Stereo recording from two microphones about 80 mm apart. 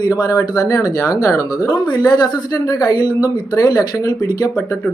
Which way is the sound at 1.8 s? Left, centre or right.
Left.